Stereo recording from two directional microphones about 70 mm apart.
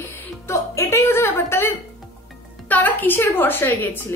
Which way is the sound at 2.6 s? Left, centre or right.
Left.